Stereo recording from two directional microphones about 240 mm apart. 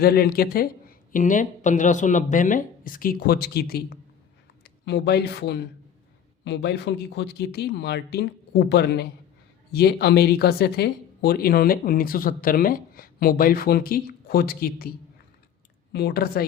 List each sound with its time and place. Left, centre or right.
0.0 s speech: left